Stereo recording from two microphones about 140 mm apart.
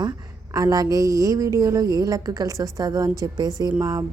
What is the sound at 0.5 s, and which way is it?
A woman's voice, 25° right (ahead or behind).